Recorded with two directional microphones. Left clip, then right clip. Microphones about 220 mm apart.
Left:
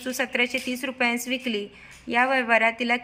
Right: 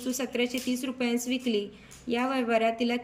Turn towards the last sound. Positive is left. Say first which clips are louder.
# left 5 dB
turn(degrees=-5)  # may be behind; listen again after turning